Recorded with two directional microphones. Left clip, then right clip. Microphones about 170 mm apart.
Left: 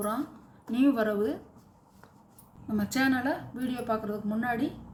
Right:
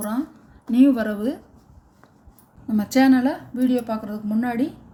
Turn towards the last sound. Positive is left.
turn(degrees=-50)  # may be behind; listen again after turning